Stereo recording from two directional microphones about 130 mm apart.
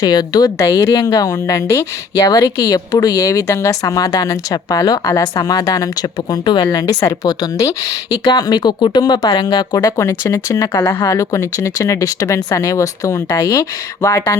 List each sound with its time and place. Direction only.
0.0 s speech: 30° left (ahead or behind)